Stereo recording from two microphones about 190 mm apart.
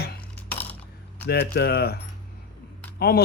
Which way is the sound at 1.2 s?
60° left (ahead or behind).